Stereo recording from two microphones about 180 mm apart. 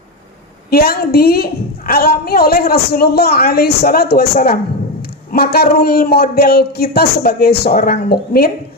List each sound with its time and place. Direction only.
0.7 s speech: 60° left (ahead or behind)